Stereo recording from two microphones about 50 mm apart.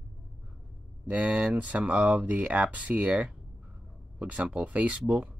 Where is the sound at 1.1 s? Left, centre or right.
Right.